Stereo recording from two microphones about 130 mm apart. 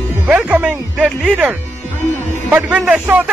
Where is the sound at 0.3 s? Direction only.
10° right (ahead or behind).